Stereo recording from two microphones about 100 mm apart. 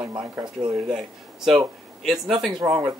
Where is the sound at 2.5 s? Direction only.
45° right (ahead or behind).